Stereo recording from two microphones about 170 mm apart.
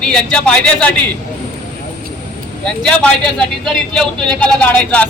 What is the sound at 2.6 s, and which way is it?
A man's voice, 5° left (ahead or behind).